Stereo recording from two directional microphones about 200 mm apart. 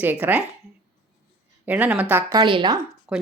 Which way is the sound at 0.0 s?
10° right (ahead or behind).